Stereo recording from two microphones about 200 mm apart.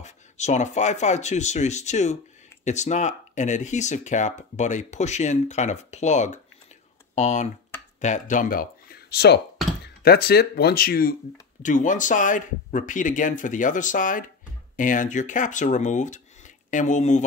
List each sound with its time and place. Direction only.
0.0 s speech: 35° left (ahead or behind)